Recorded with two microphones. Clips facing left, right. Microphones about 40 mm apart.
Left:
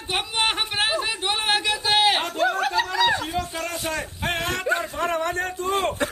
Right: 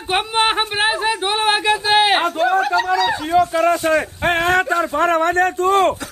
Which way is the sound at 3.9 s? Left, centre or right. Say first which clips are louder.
Right 10 dB; right.